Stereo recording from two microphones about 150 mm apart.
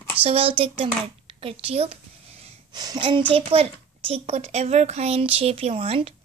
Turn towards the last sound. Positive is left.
turn(degrees=-40)  # may be behind; listen again after turning